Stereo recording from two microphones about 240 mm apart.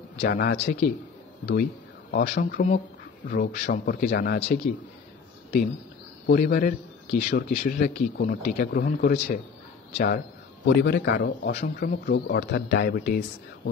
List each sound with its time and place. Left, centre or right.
0.2 s a man's voice: left
6.2 s a man's voice: left